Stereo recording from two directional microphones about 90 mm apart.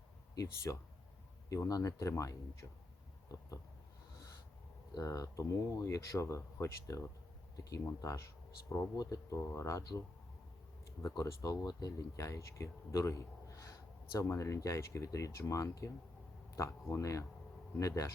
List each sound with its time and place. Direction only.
0.3 s speech: 40° left (ahead or behind)
4.9 s speech: 40° left (ahead or behind)
11.2 s speech: 45° left (ahead or behind)